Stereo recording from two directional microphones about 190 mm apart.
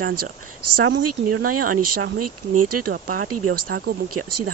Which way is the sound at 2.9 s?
50° right (ahead or behind).